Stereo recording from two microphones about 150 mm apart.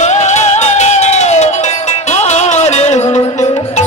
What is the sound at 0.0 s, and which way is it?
Music, 50° left (ahead or behind).